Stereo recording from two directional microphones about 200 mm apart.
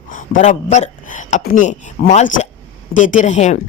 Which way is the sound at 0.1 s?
40° left (ahead or behind).